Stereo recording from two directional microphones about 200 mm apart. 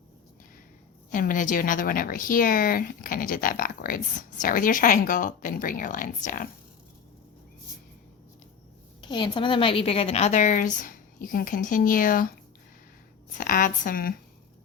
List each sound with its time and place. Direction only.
1.1 s speech: 40° left (ahead or behind)
9.0 s a woman's voice: 25° left (ahead or behind); by 12.3 s 45° left (ahead or behind)
13.4 s speech: 45° left (ahead or behind)